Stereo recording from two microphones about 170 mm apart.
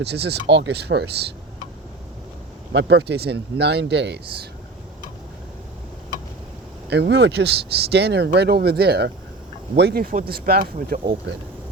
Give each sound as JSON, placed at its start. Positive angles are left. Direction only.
{"t": 0.0, "sound": "speech", "side_deg": -75}
{"t": 2.7, "sound": "speech", "side_deg": -85}
{"t": 6.9, "sound": "speech", "side_deg": -80}